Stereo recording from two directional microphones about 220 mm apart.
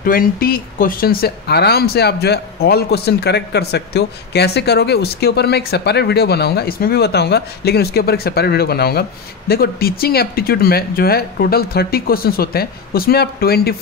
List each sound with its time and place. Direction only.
0.0 s speech: 40° left (ahead or behind)